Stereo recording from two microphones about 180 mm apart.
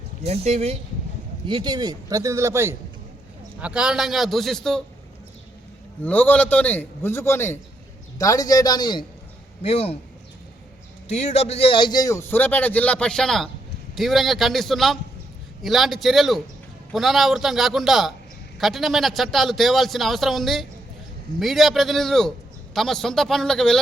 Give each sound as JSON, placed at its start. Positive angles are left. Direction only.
{"t": 0.2, "sound": "speech", "side_deg": -35}
{"t": 1.5, "sound": "speech", "side_deg": -25}
{"t": 3.6, "sound": "a man's voice", "side_deg": -5}
{"t": 6.0, "sound": "a man's voice", "side_deg": 10}
{"t": 11.1, "sound": "a man's voice", "side_deg": 35}